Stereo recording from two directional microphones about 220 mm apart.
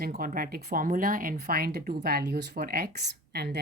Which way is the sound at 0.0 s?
40° right (ahead or behind).